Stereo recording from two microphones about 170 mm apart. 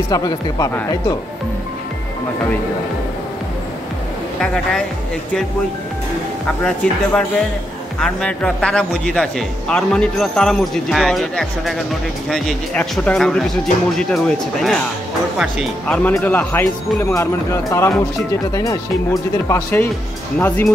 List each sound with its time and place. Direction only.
0.1 s speech: 20° left (ahead or behind)
6.6 s speech: 5° left (ahead or behind)
15.9 s speech: 10° left (ahead or behind)